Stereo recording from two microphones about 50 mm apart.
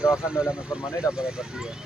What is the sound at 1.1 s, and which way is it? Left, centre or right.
Speech, left.